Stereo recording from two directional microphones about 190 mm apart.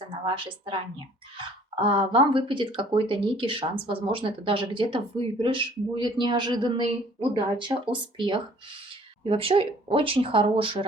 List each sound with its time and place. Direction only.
0.3 s speech: 25° right (ahead or behind)